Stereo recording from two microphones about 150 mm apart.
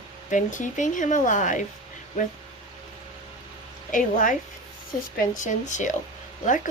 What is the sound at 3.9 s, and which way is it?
Speech, 65° left (ahead or behind).